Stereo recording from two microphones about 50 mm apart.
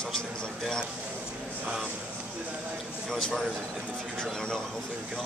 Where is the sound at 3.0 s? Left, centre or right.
Centre.